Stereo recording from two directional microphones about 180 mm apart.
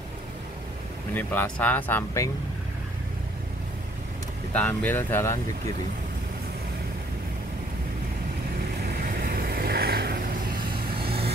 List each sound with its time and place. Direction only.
1.1 s speech: 10° left (ahead or behind)
4.6 s speech: 10° left (ahead or behind)
8.8 s vehicle: 55° right (ahead or behind)